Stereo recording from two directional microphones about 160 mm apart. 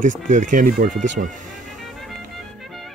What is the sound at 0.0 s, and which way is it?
Speech, 55° right (ahead or behind).